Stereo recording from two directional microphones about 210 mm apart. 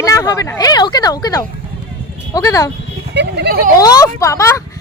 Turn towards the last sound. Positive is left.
turn(degrees=15)  # may be behind; listen again after turning